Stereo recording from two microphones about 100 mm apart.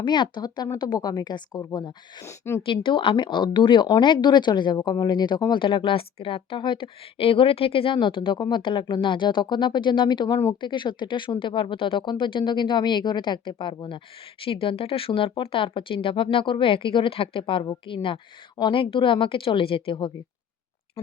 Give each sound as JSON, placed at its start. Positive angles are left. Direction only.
{"t": 0.0, "sound": "speech", "side_deg": 50}
{"t": 2.2, "sound": "a woman's voice", "side_deg": 25}
{"t": 2.6, "sound": "speech", "side_deg": 60}